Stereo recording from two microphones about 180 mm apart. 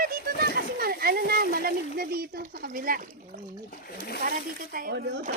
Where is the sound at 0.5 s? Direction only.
60° right (ahead or behind).